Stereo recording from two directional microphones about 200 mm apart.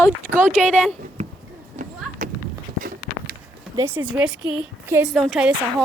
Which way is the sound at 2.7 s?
45° right (ahead or behind).